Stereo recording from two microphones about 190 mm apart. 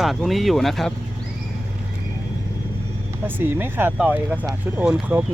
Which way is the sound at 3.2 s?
10° right (ahead or behind).